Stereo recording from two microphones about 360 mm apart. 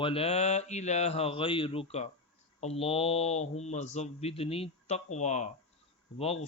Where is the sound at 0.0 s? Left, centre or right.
Centre.